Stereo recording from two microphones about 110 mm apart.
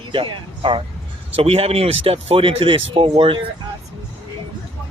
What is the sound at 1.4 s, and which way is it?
Speech, 65° right (ahead or behind).